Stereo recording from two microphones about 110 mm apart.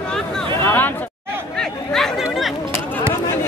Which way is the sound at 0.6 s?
20° left (ahead or behind).